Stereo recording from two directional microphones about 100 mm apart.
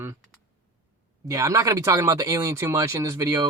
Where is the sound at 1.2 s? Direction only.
35° right (ahead or behind).